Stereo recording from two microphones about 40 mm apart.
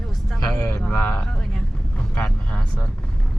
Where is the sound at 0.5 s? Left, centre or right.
Left.